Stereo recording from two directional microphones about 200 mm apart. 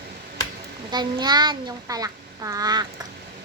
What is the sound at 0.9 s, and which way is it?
A child's voice, 20° right (ahead or behind).